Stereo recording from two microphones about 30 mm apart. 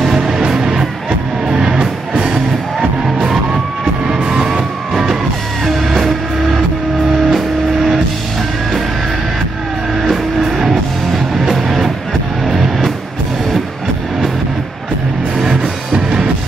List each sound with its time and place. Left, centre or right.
0.0 s music: centre
4.4 s music: centre
5.7 s music: centre
10.0 s music: centre
15.5 s music: right